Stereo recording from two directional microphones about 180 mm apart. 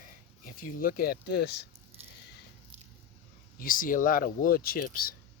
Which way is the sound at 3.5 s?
50° left (ahead or behind).